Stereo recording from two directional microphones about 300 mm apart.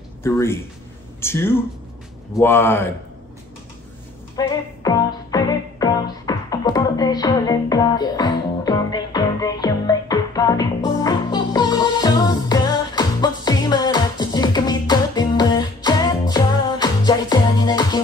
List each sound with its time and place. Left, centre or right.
0.2 s speech: centre
4.4 s music: centre